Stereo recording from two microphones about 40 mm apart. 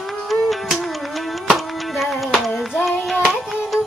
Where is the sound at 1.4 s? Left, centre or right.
Centre.